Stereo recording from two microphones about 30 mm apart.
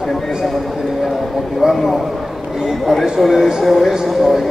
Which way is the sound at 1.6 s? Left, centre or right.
Centre.